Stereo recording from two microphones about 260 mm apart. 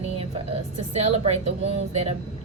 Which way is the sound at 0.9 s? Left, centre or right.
Right.